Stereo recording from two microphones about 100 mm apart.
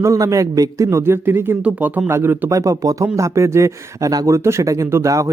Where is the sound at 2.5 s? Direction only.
35° right (ahead or behind).